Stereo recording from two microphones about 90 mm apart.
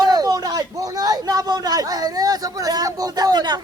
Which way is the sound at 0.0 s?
45° right (ahead or behind).